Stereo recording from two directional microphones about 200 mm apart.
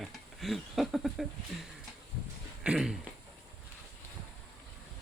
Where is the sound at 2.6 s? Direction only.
5° right (ahead or behind).